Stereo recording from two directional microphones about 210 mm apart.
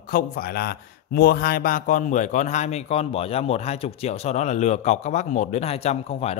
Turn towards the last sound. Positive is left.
turn(degrees=30)  # may be behind; listen again after turning